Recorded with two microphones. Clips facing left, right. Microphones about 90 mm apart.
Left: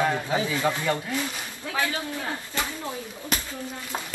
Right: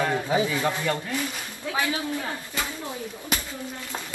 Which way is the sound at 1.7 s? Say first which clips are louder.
Right 1 dB; 15° right (ahead or behind).